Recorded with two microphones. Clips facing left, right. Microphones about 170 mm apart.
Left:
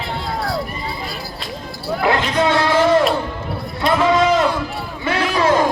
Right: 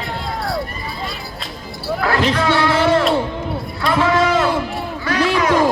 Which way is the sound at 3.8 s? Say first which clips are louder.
Left 1 dB; 20° left (ahead or behind).